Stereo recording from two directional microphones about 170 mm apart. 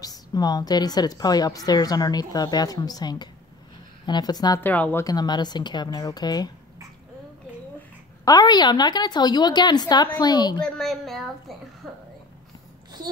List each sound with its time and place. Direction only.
0.0 s a woman's voice: 25° left (ahead or behind)
4.6 s speech: 10° left (ahead or behind)
5.0 s a woman's voice: 25° left (ahead or behind)
8.3 s a woman's voice: 25° left (ahead or behind)
10.6 s a woman's voice: centre (ahead or behind)